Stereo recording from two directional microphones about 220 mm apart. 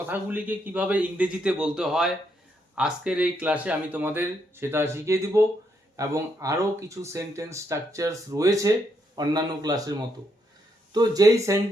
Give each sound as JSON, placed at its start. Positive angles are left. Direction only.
{"t": 0.0, "sound": "speech", "side_deg": -10}
{"t": 10.9, "sound": "speech", "side_deg": -15}